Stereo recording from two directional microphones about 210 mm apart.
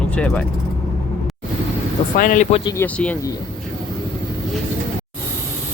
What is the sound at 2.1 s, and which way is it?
Speech, 40° left (ahead or behind).